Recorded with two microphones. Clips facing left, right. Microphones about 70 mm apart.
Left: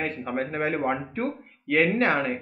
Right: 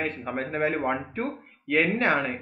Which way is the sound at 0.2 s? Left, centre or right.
Right.